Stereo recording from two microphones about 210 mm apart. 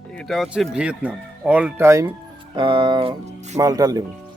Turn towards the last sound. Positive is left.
turn(degrees=-15)  # may be behind; listen again after turning